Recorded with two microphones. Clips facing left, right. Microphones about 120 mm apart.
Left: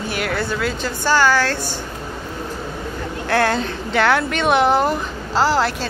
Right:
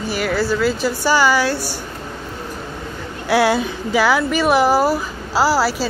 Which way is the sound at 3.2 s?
10° right (ahead or behind).